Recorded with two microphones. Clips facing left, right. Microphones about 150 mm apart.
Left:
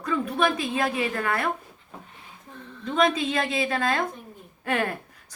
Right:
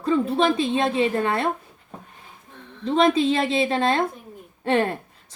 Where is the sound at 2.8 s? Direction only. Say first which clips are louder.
Right 5 dB; 30° right (ahead or behind).